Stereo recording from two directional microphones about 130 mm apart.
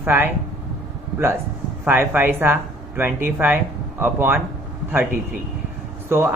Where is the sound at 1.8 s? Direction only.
15° right (ahead or behind).